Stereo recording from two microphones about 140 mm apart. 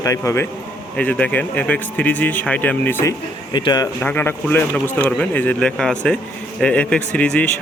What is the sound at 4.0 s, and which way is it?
A man's voice, 15° left (ahead or behind).